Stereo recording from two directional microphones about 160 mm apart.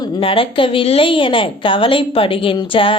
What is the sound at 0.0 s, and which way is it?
A woman's voice, 35° left (ahead or behind).